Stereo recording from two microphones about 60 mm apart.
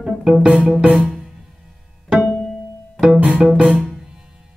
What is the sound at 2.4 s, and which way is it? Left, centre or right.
Music, centre.